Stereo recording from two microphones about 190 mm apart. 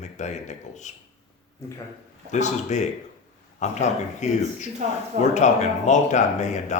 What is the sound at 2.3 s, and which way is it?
Speech, 35° left (ahead or behind).